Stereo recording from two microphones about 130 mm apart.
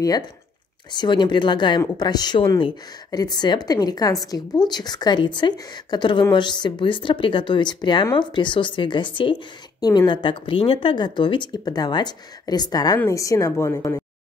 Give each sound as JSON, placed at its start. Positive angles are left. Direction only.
{"t": 0.9, "sound": "a woman's voice", "side_deg": 35}